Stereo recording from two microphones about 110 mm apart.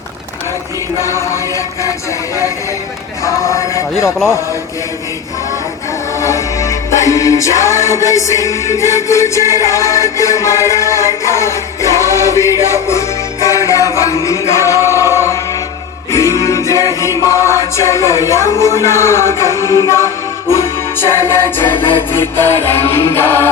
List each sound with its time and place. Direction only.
0.9 s music: 25° left (ahead or behind)
3.2 s music: 30° left (ahead or behind)
6.1 s music: 30° left (ahead or behind)
19.7 s music: 30° right (ahead or behind)
21.1 s music: 25° left (ahead or behind)